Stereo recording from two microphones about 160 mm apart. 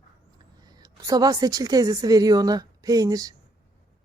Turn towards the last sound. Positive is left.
turn(degrees=-25)  # may be behind; listen again after turning